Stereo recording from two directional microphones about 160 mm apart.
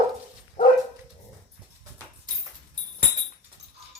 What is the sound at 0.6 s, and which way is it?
Dog, 50° left (ahead or behind).